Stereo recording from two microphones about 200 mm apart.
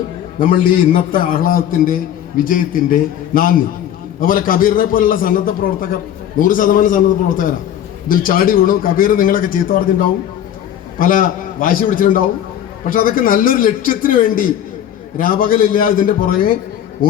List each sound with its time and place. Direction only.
0.3 s a man's voice: 45° left (ahead or behind)
10.9 s a man's voice: 45° left (ahead or behind)